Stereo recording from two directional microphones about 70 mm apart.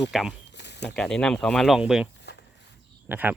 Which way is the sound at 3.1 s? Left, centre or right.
Right.